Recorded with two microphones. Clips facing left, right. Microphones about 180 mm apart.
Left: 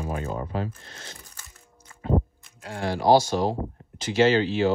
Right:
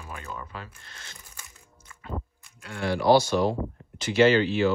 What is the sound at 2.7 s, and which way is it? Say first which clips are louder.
Speech: even; 45° left (ahead or behind).